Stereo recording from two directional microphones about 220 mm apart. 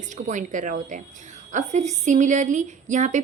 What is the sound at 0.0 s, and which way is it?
Speech, 35° right (ahead or behind).